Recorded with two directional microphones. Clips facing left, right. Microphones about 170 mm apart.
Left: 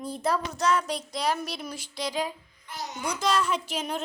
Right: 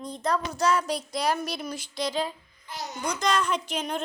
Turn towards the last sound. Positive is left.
turn(degrees=5)  # may be behind; listen again after turning